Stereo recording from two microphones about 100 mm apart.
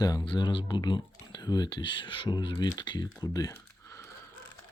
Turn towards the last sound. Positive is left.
turn(degrees=30)  # may be behind; listen again after turning